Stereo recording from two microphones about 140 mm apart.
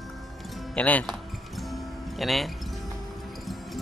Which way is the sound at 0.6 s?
10° left (ahead or behind).